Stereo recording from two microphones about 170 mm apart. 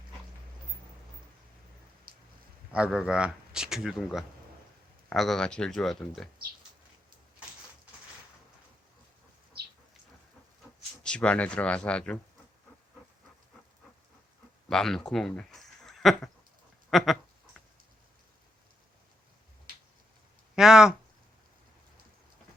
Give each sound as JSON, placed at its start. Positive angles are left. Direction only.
{"t": 2.1, "sound": "a sound", "side_deg": -60}
{"t": 2.7, "sound": "speech", "side_deg": -5}
{"t": 11.0, "sound": "speech", "side_deg": 5}
{"t": 14.7, "sound": "speech", "side_deg": 5}
{"t": 20.6, "sound": "speech", "side_deg": -5}